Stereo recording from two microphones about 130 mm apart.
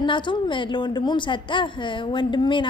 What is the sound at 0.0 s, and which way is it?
A woman's voice, 40° left (ahead or behind).